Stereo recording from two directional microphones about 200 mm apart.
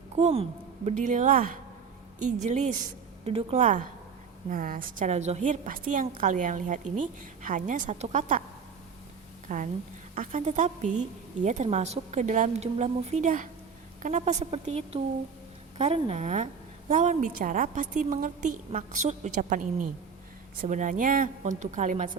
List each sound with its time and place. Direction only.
0.2 s a woman's voice: 35° right (ahead or behind)
9.5 s a woman's voice: 40° right (ahead or behind)